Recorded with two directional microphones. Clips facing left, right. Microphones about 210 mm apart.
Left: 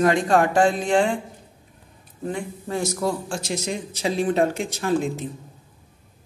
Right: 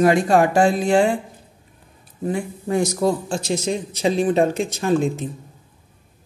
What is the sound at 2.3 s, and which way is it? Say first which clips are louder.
A man's voice: right 5 dB; 10° right (ahead or behind).